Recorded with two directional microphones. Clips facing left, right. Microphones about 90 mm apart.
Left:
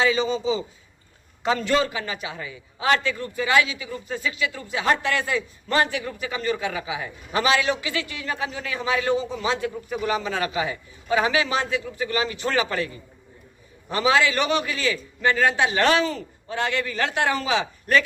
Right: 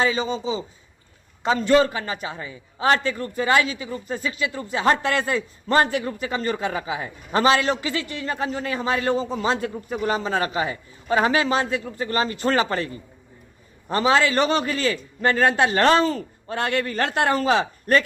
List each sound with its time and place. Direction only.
0.1 s a man's voice: 30° right (ahead or behind)